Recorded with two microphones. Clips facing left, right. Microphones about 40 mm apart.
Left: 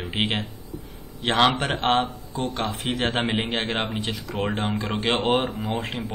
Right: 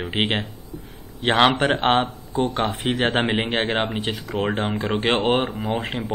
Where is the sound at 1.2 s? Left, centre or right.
Centre.